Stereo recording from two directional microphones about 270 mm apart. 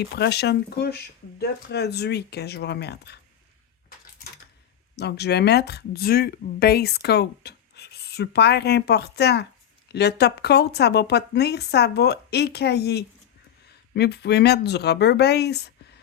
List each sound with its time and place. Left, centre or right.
0.0 s speech: left
4.9 s speech: left